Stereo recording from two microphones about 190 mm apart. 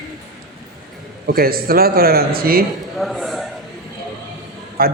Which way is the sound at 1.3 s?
50° right (ahead or behind).